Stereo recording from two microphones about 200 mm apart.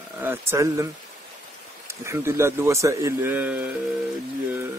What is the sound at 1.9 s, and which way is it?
Speech, 15° right (ahead or behind).